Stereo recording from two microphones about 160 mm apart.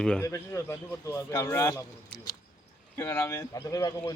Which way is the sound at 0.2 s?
15° left (ahead or behind).